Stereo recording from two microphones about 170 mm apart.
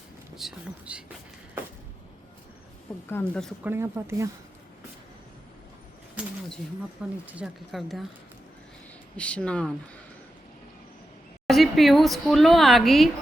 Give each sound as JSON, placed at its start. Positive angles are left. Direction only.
{"t": 0.3, "sound": "speech", "side_deg": -5}
{"t": 3.1, "sound": "speech", "side_deg": 15}
{"t": 3.6, "sound": "speech", "side_deg": -15}
{"t": 7.3, "sound": "speech", "side_deg": -5}
{"t": 9.1, "sound": "speech", "side_deg": 5}
{"t": 11.4, "sound": "speech", "side_deg": 0}